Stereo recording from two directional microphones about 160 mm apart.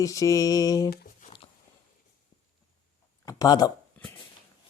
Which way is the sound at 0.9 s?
55° left (ahead or behind).